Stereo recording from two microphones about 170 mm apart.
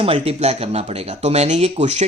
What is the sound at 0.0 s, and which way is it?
Speech, 35° right (ahead or behind).